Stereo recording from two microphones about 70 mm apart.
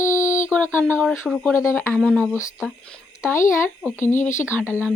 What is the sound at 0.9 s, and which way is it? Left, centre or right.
Speech, centre.